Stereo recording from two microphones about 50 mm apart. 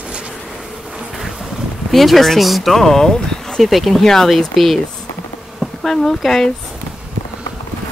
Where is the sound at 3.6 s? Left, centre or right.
Centre.